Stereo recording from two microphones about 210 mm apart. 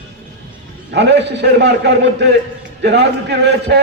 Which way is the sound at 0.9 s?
55° right (ahead or behind).